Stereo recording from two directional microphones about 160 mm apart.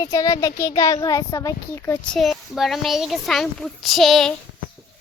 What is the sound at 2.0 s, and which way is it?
A child's voice, centre (ahead or behind).